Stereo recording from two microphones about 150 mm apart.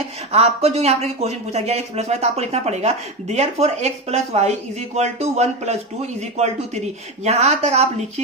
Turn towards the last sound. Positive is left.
turn(degrees=-45)  # may be behind; listen again after turning